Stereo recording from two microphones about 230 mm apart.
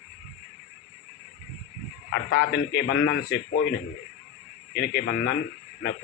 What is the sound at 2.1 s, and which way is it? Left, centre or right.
Speech, left.